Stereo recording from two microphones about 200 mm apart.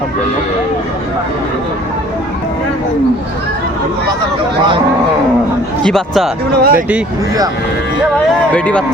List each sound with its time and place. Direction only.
5.8 s speech: centre (ahead or behind)
6.6 s speech: 45° right (ahead or behind)
8.5 s speech: 5° left (ahead or behind)